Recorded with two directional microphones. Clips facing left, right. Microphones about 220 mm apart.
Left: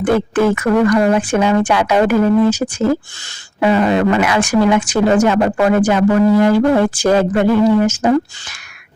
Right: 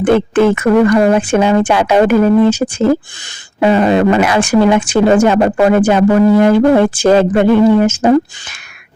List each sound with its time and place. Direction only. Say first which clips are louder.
0.0 s a woman's voice: right 4 dB; 25° right (ahead or behind)